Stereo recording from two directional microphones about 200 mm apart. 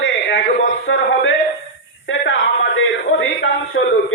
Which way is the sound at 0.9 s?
80° left.